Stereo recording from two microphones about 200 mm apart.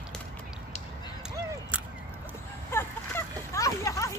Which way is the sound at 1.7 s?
5° right (ahead or behind).